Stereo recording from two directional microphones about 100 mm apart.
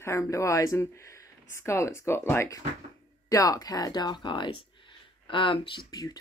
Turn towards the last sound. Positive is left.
turn(degrees=40)  # may be behind; listen again after turning